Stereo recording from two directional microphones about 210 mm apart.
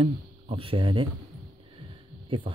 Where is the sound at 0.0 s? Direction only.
25° right (ahead or behind).